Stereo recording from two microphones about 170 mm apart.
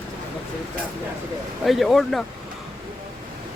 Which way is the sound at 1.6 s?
Centre (ahead or behind).